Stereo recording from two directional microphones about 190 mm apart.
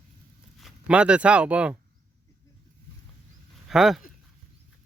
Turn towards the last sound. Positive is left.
turn(degrees=0)  # may be behind; listen again after turning